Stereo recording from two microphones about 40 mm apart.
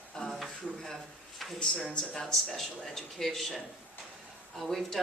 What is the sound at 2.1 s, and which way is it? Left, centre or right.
A woman's voice, centre.